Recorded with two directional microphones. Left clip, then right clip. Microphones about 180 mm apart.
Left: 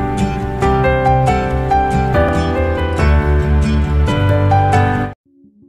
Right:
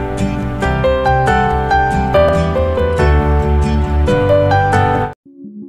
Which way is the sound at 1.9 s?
Centre (ahead or behind).